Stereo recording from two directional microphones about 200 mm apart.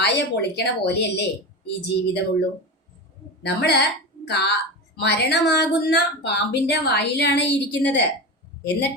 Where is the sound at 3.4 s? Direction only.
55° left (ahead or behind).